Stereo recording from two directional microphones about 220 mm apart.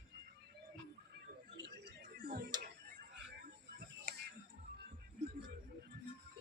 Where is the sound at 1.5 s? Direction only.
45° right (ahead or behind).